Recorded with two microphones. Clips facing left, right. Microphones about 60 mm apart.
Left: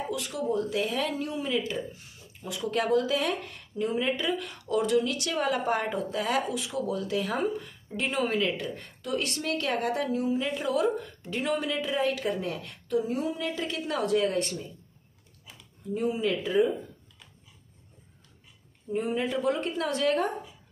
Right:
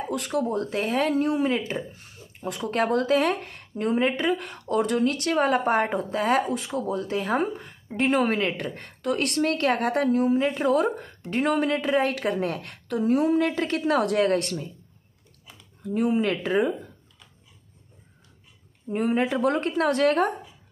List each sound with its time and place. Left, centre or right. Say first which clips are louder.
0.1 s speech: right 5 dB; right
15.8 s a woman's voice: right 5 dB; right
19.0 s a woman's voice: right 5 dB; right